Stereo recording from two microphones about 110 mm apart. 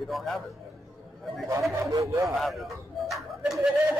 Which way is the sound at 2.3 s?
Centre (ahead or behind).